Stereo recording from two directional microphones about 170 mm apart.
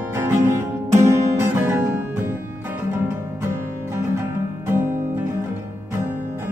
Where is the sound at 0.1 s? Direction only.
15° right (ahead or behind).